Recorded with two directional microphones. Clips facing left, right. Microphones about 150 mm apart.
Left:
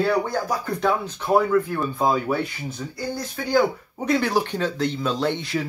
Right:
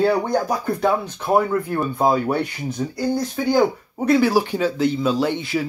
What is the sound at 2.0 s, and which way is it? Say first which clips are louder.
Speech: right 3 dB; 25° right (ahead or behind).